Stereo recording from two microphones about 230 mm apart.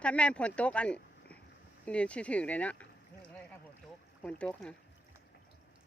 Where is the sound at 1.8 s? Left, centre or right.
Centre.